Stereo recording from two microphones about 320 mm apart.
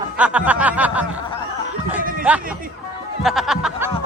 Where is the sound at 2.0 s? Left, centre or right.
Right.